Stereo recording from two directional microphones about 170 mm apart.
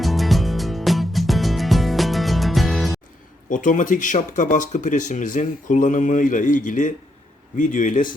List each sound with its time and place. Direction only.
0.0 s music: centre (ahead or behind)
3.5 s speech: 50° left (ahead or behind)